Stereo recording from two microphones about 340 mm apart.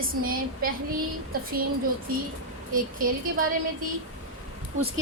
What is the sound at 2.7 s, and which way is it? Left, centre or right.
Speech, right.